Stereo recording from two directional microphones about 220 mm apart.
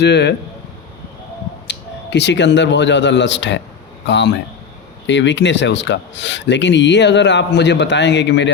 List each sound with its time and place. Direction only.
0.0 s speech: 50° left (ahead or behind)
1.6 s speech: 50° left (ahead or behind)